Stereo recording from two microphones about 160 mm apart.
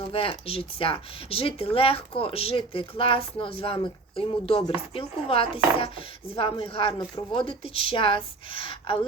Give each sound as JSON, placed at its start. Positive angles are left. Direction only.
{"t": 0.1, "sound": "speech", "side_deg": 35}